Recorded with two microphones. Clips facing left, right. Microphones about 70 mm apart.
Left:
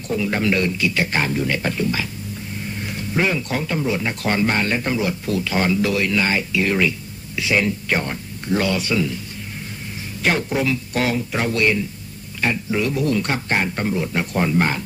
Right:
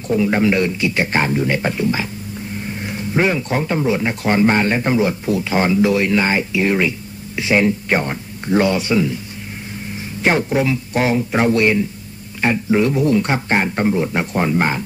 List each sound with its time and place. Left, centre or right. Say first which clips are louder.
0.1 s speech: right 5 dB; right
10.2 s speech: right 4 dB; right